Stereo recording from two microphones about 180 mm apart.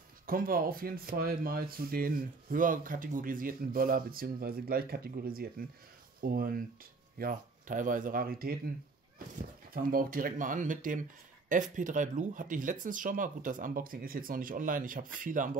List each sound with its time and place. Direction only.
0.3 s speech: 50° right (ahead or behind)
9.8 s speech: 50° right (ahead or behind)